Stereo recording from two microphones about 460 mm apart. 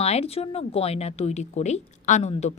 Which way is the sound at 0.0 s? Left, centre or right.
Centre.